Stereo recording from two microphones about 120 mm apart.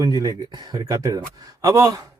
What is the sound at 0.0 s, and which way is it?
A man's voice, 35° right (ahead or behind).